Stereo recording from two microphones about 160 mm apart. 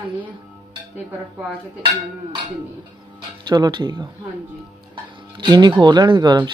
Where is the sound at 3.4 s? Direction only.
25° right (ahead or behind).